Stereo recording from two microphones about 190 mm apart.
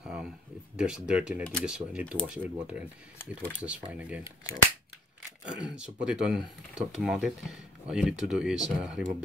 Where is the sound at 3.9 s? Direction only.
5° right (ahead or behind).